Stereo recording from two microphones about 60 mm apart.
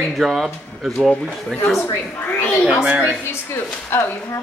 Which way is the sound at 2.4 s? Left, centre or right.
Left.